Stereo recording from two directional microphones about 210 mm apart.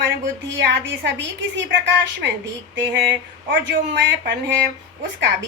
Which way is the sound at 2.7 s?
55° right (ahead or behind).